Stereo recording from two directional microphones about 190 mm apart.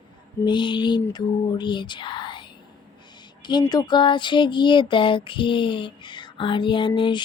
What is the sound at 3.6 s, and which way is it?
Speech, 25° left (ahead or behind).